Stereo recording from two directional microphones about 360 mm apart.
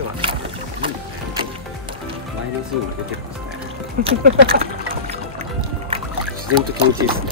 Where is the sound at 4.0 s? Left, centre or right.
Centre.